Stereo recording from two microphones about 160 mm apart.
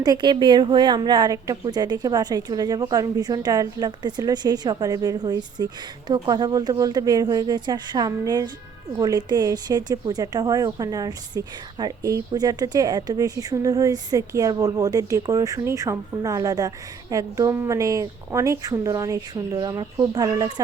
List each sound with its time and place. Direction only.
0.0 s speech: 25° right (ahead or behind)